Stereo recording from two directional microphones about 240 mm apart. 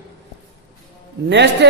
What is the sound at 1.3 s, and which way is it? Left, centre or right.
Speech, right.